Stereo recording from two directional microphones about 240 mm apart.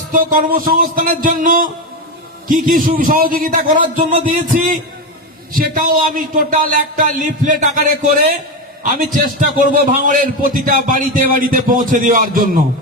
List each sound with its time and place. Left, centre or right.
0.1 s speech: right